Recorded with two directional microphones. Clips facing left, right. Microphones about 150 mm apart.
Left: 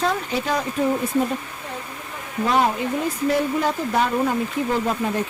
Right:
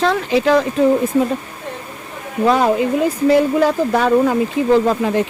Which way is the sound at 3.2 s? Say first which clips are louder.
Right 8 dB; 90° right.